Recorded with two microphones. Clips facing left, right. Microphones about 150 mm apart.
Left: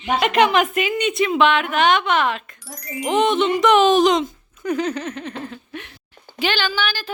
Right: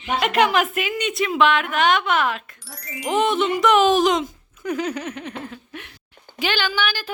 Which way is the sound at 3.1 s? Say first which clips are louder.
Left 2 dB; 5° right (ahead or behind).